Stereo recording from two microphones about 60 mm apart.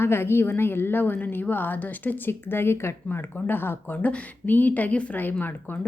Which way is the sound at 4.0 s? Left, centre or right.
Left.